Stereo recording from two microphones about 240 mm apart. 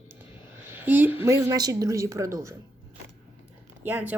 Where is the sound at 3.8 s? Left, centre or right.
Centre.